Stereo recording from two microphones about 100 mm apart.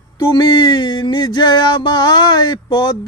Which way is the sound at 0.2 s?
45° left (ahead or behind).